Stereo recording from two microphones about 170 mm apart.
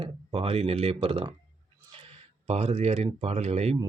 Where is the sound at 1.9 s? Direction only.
35° right (ahead or behind).